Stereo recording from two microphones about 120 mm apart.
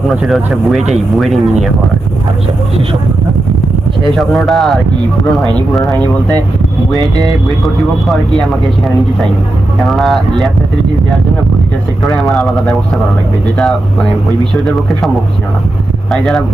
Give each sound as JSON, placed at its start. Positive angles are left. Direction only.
{"t": 0.1, "sound": "speech", "side_deg": 0}
{"t": 4.0, "sound": "speech", "side_deg": 0}
{"t": 7.2, "sound": "speech", "side_deg": 0}
{"t": 9.8, "sound": "speech", "side_deg": 0}
{"t": 12.0, "sound": "speech", "side_deg": 0}
{"t": 16.1, "sound": "speech", "side_deg": 5}